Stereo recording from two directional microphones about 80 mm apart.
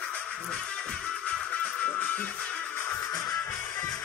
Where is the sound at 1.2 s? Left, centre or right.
Centre.